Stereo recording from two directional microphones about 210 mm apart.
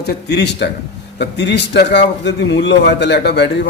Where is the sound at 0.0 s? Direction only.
55° left (ahead or behind).